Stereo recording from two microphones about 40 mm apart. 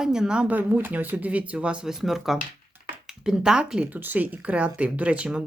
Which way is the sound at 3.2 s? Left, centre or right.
Centre.